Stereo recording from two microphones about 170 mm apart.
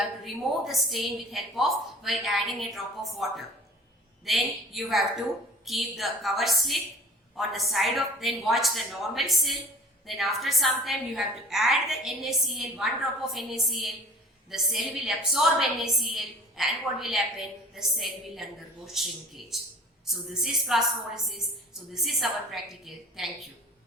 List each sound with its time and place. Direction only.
0.3 s a woman's voice: centre (ahead or behind)
21.9 s a woman's voice: centre (ahead or behind)